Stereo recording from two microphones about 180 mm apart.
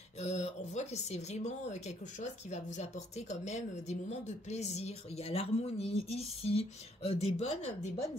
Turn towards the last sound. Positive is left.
turn(degrees=40)  # may be behind; listen again after turning